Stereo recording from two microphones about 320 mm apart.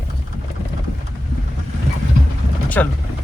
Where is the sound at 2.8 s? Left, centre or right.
Centre.